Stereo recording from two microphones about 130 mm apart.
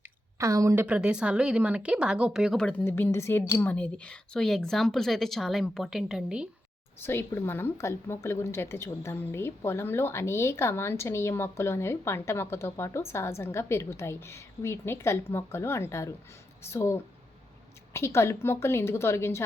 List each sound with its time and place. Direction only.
0.3 s a woman's voice: 25° right (ahead or behind)
0.9 s speech: 10° right (ahead or behind)
7.0 s a woman's voice: 20° left (ahead or behind)